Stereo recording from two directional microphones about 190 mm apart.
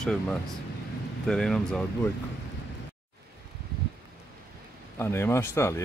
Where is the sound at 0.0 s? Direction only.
5° left (ahead or behind).